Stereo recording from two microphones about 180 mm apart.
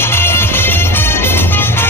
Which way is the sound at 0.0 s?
10° left (ahead or behind).